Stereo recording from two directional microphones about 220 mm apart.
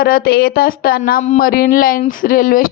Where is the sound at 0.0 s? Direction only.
45° left (ahead or behind).